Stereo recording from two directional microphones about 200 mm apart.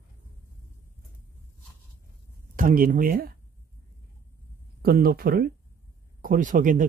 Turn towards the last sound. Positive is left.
turn(degrees=-40)  # may be behind; listen again after turning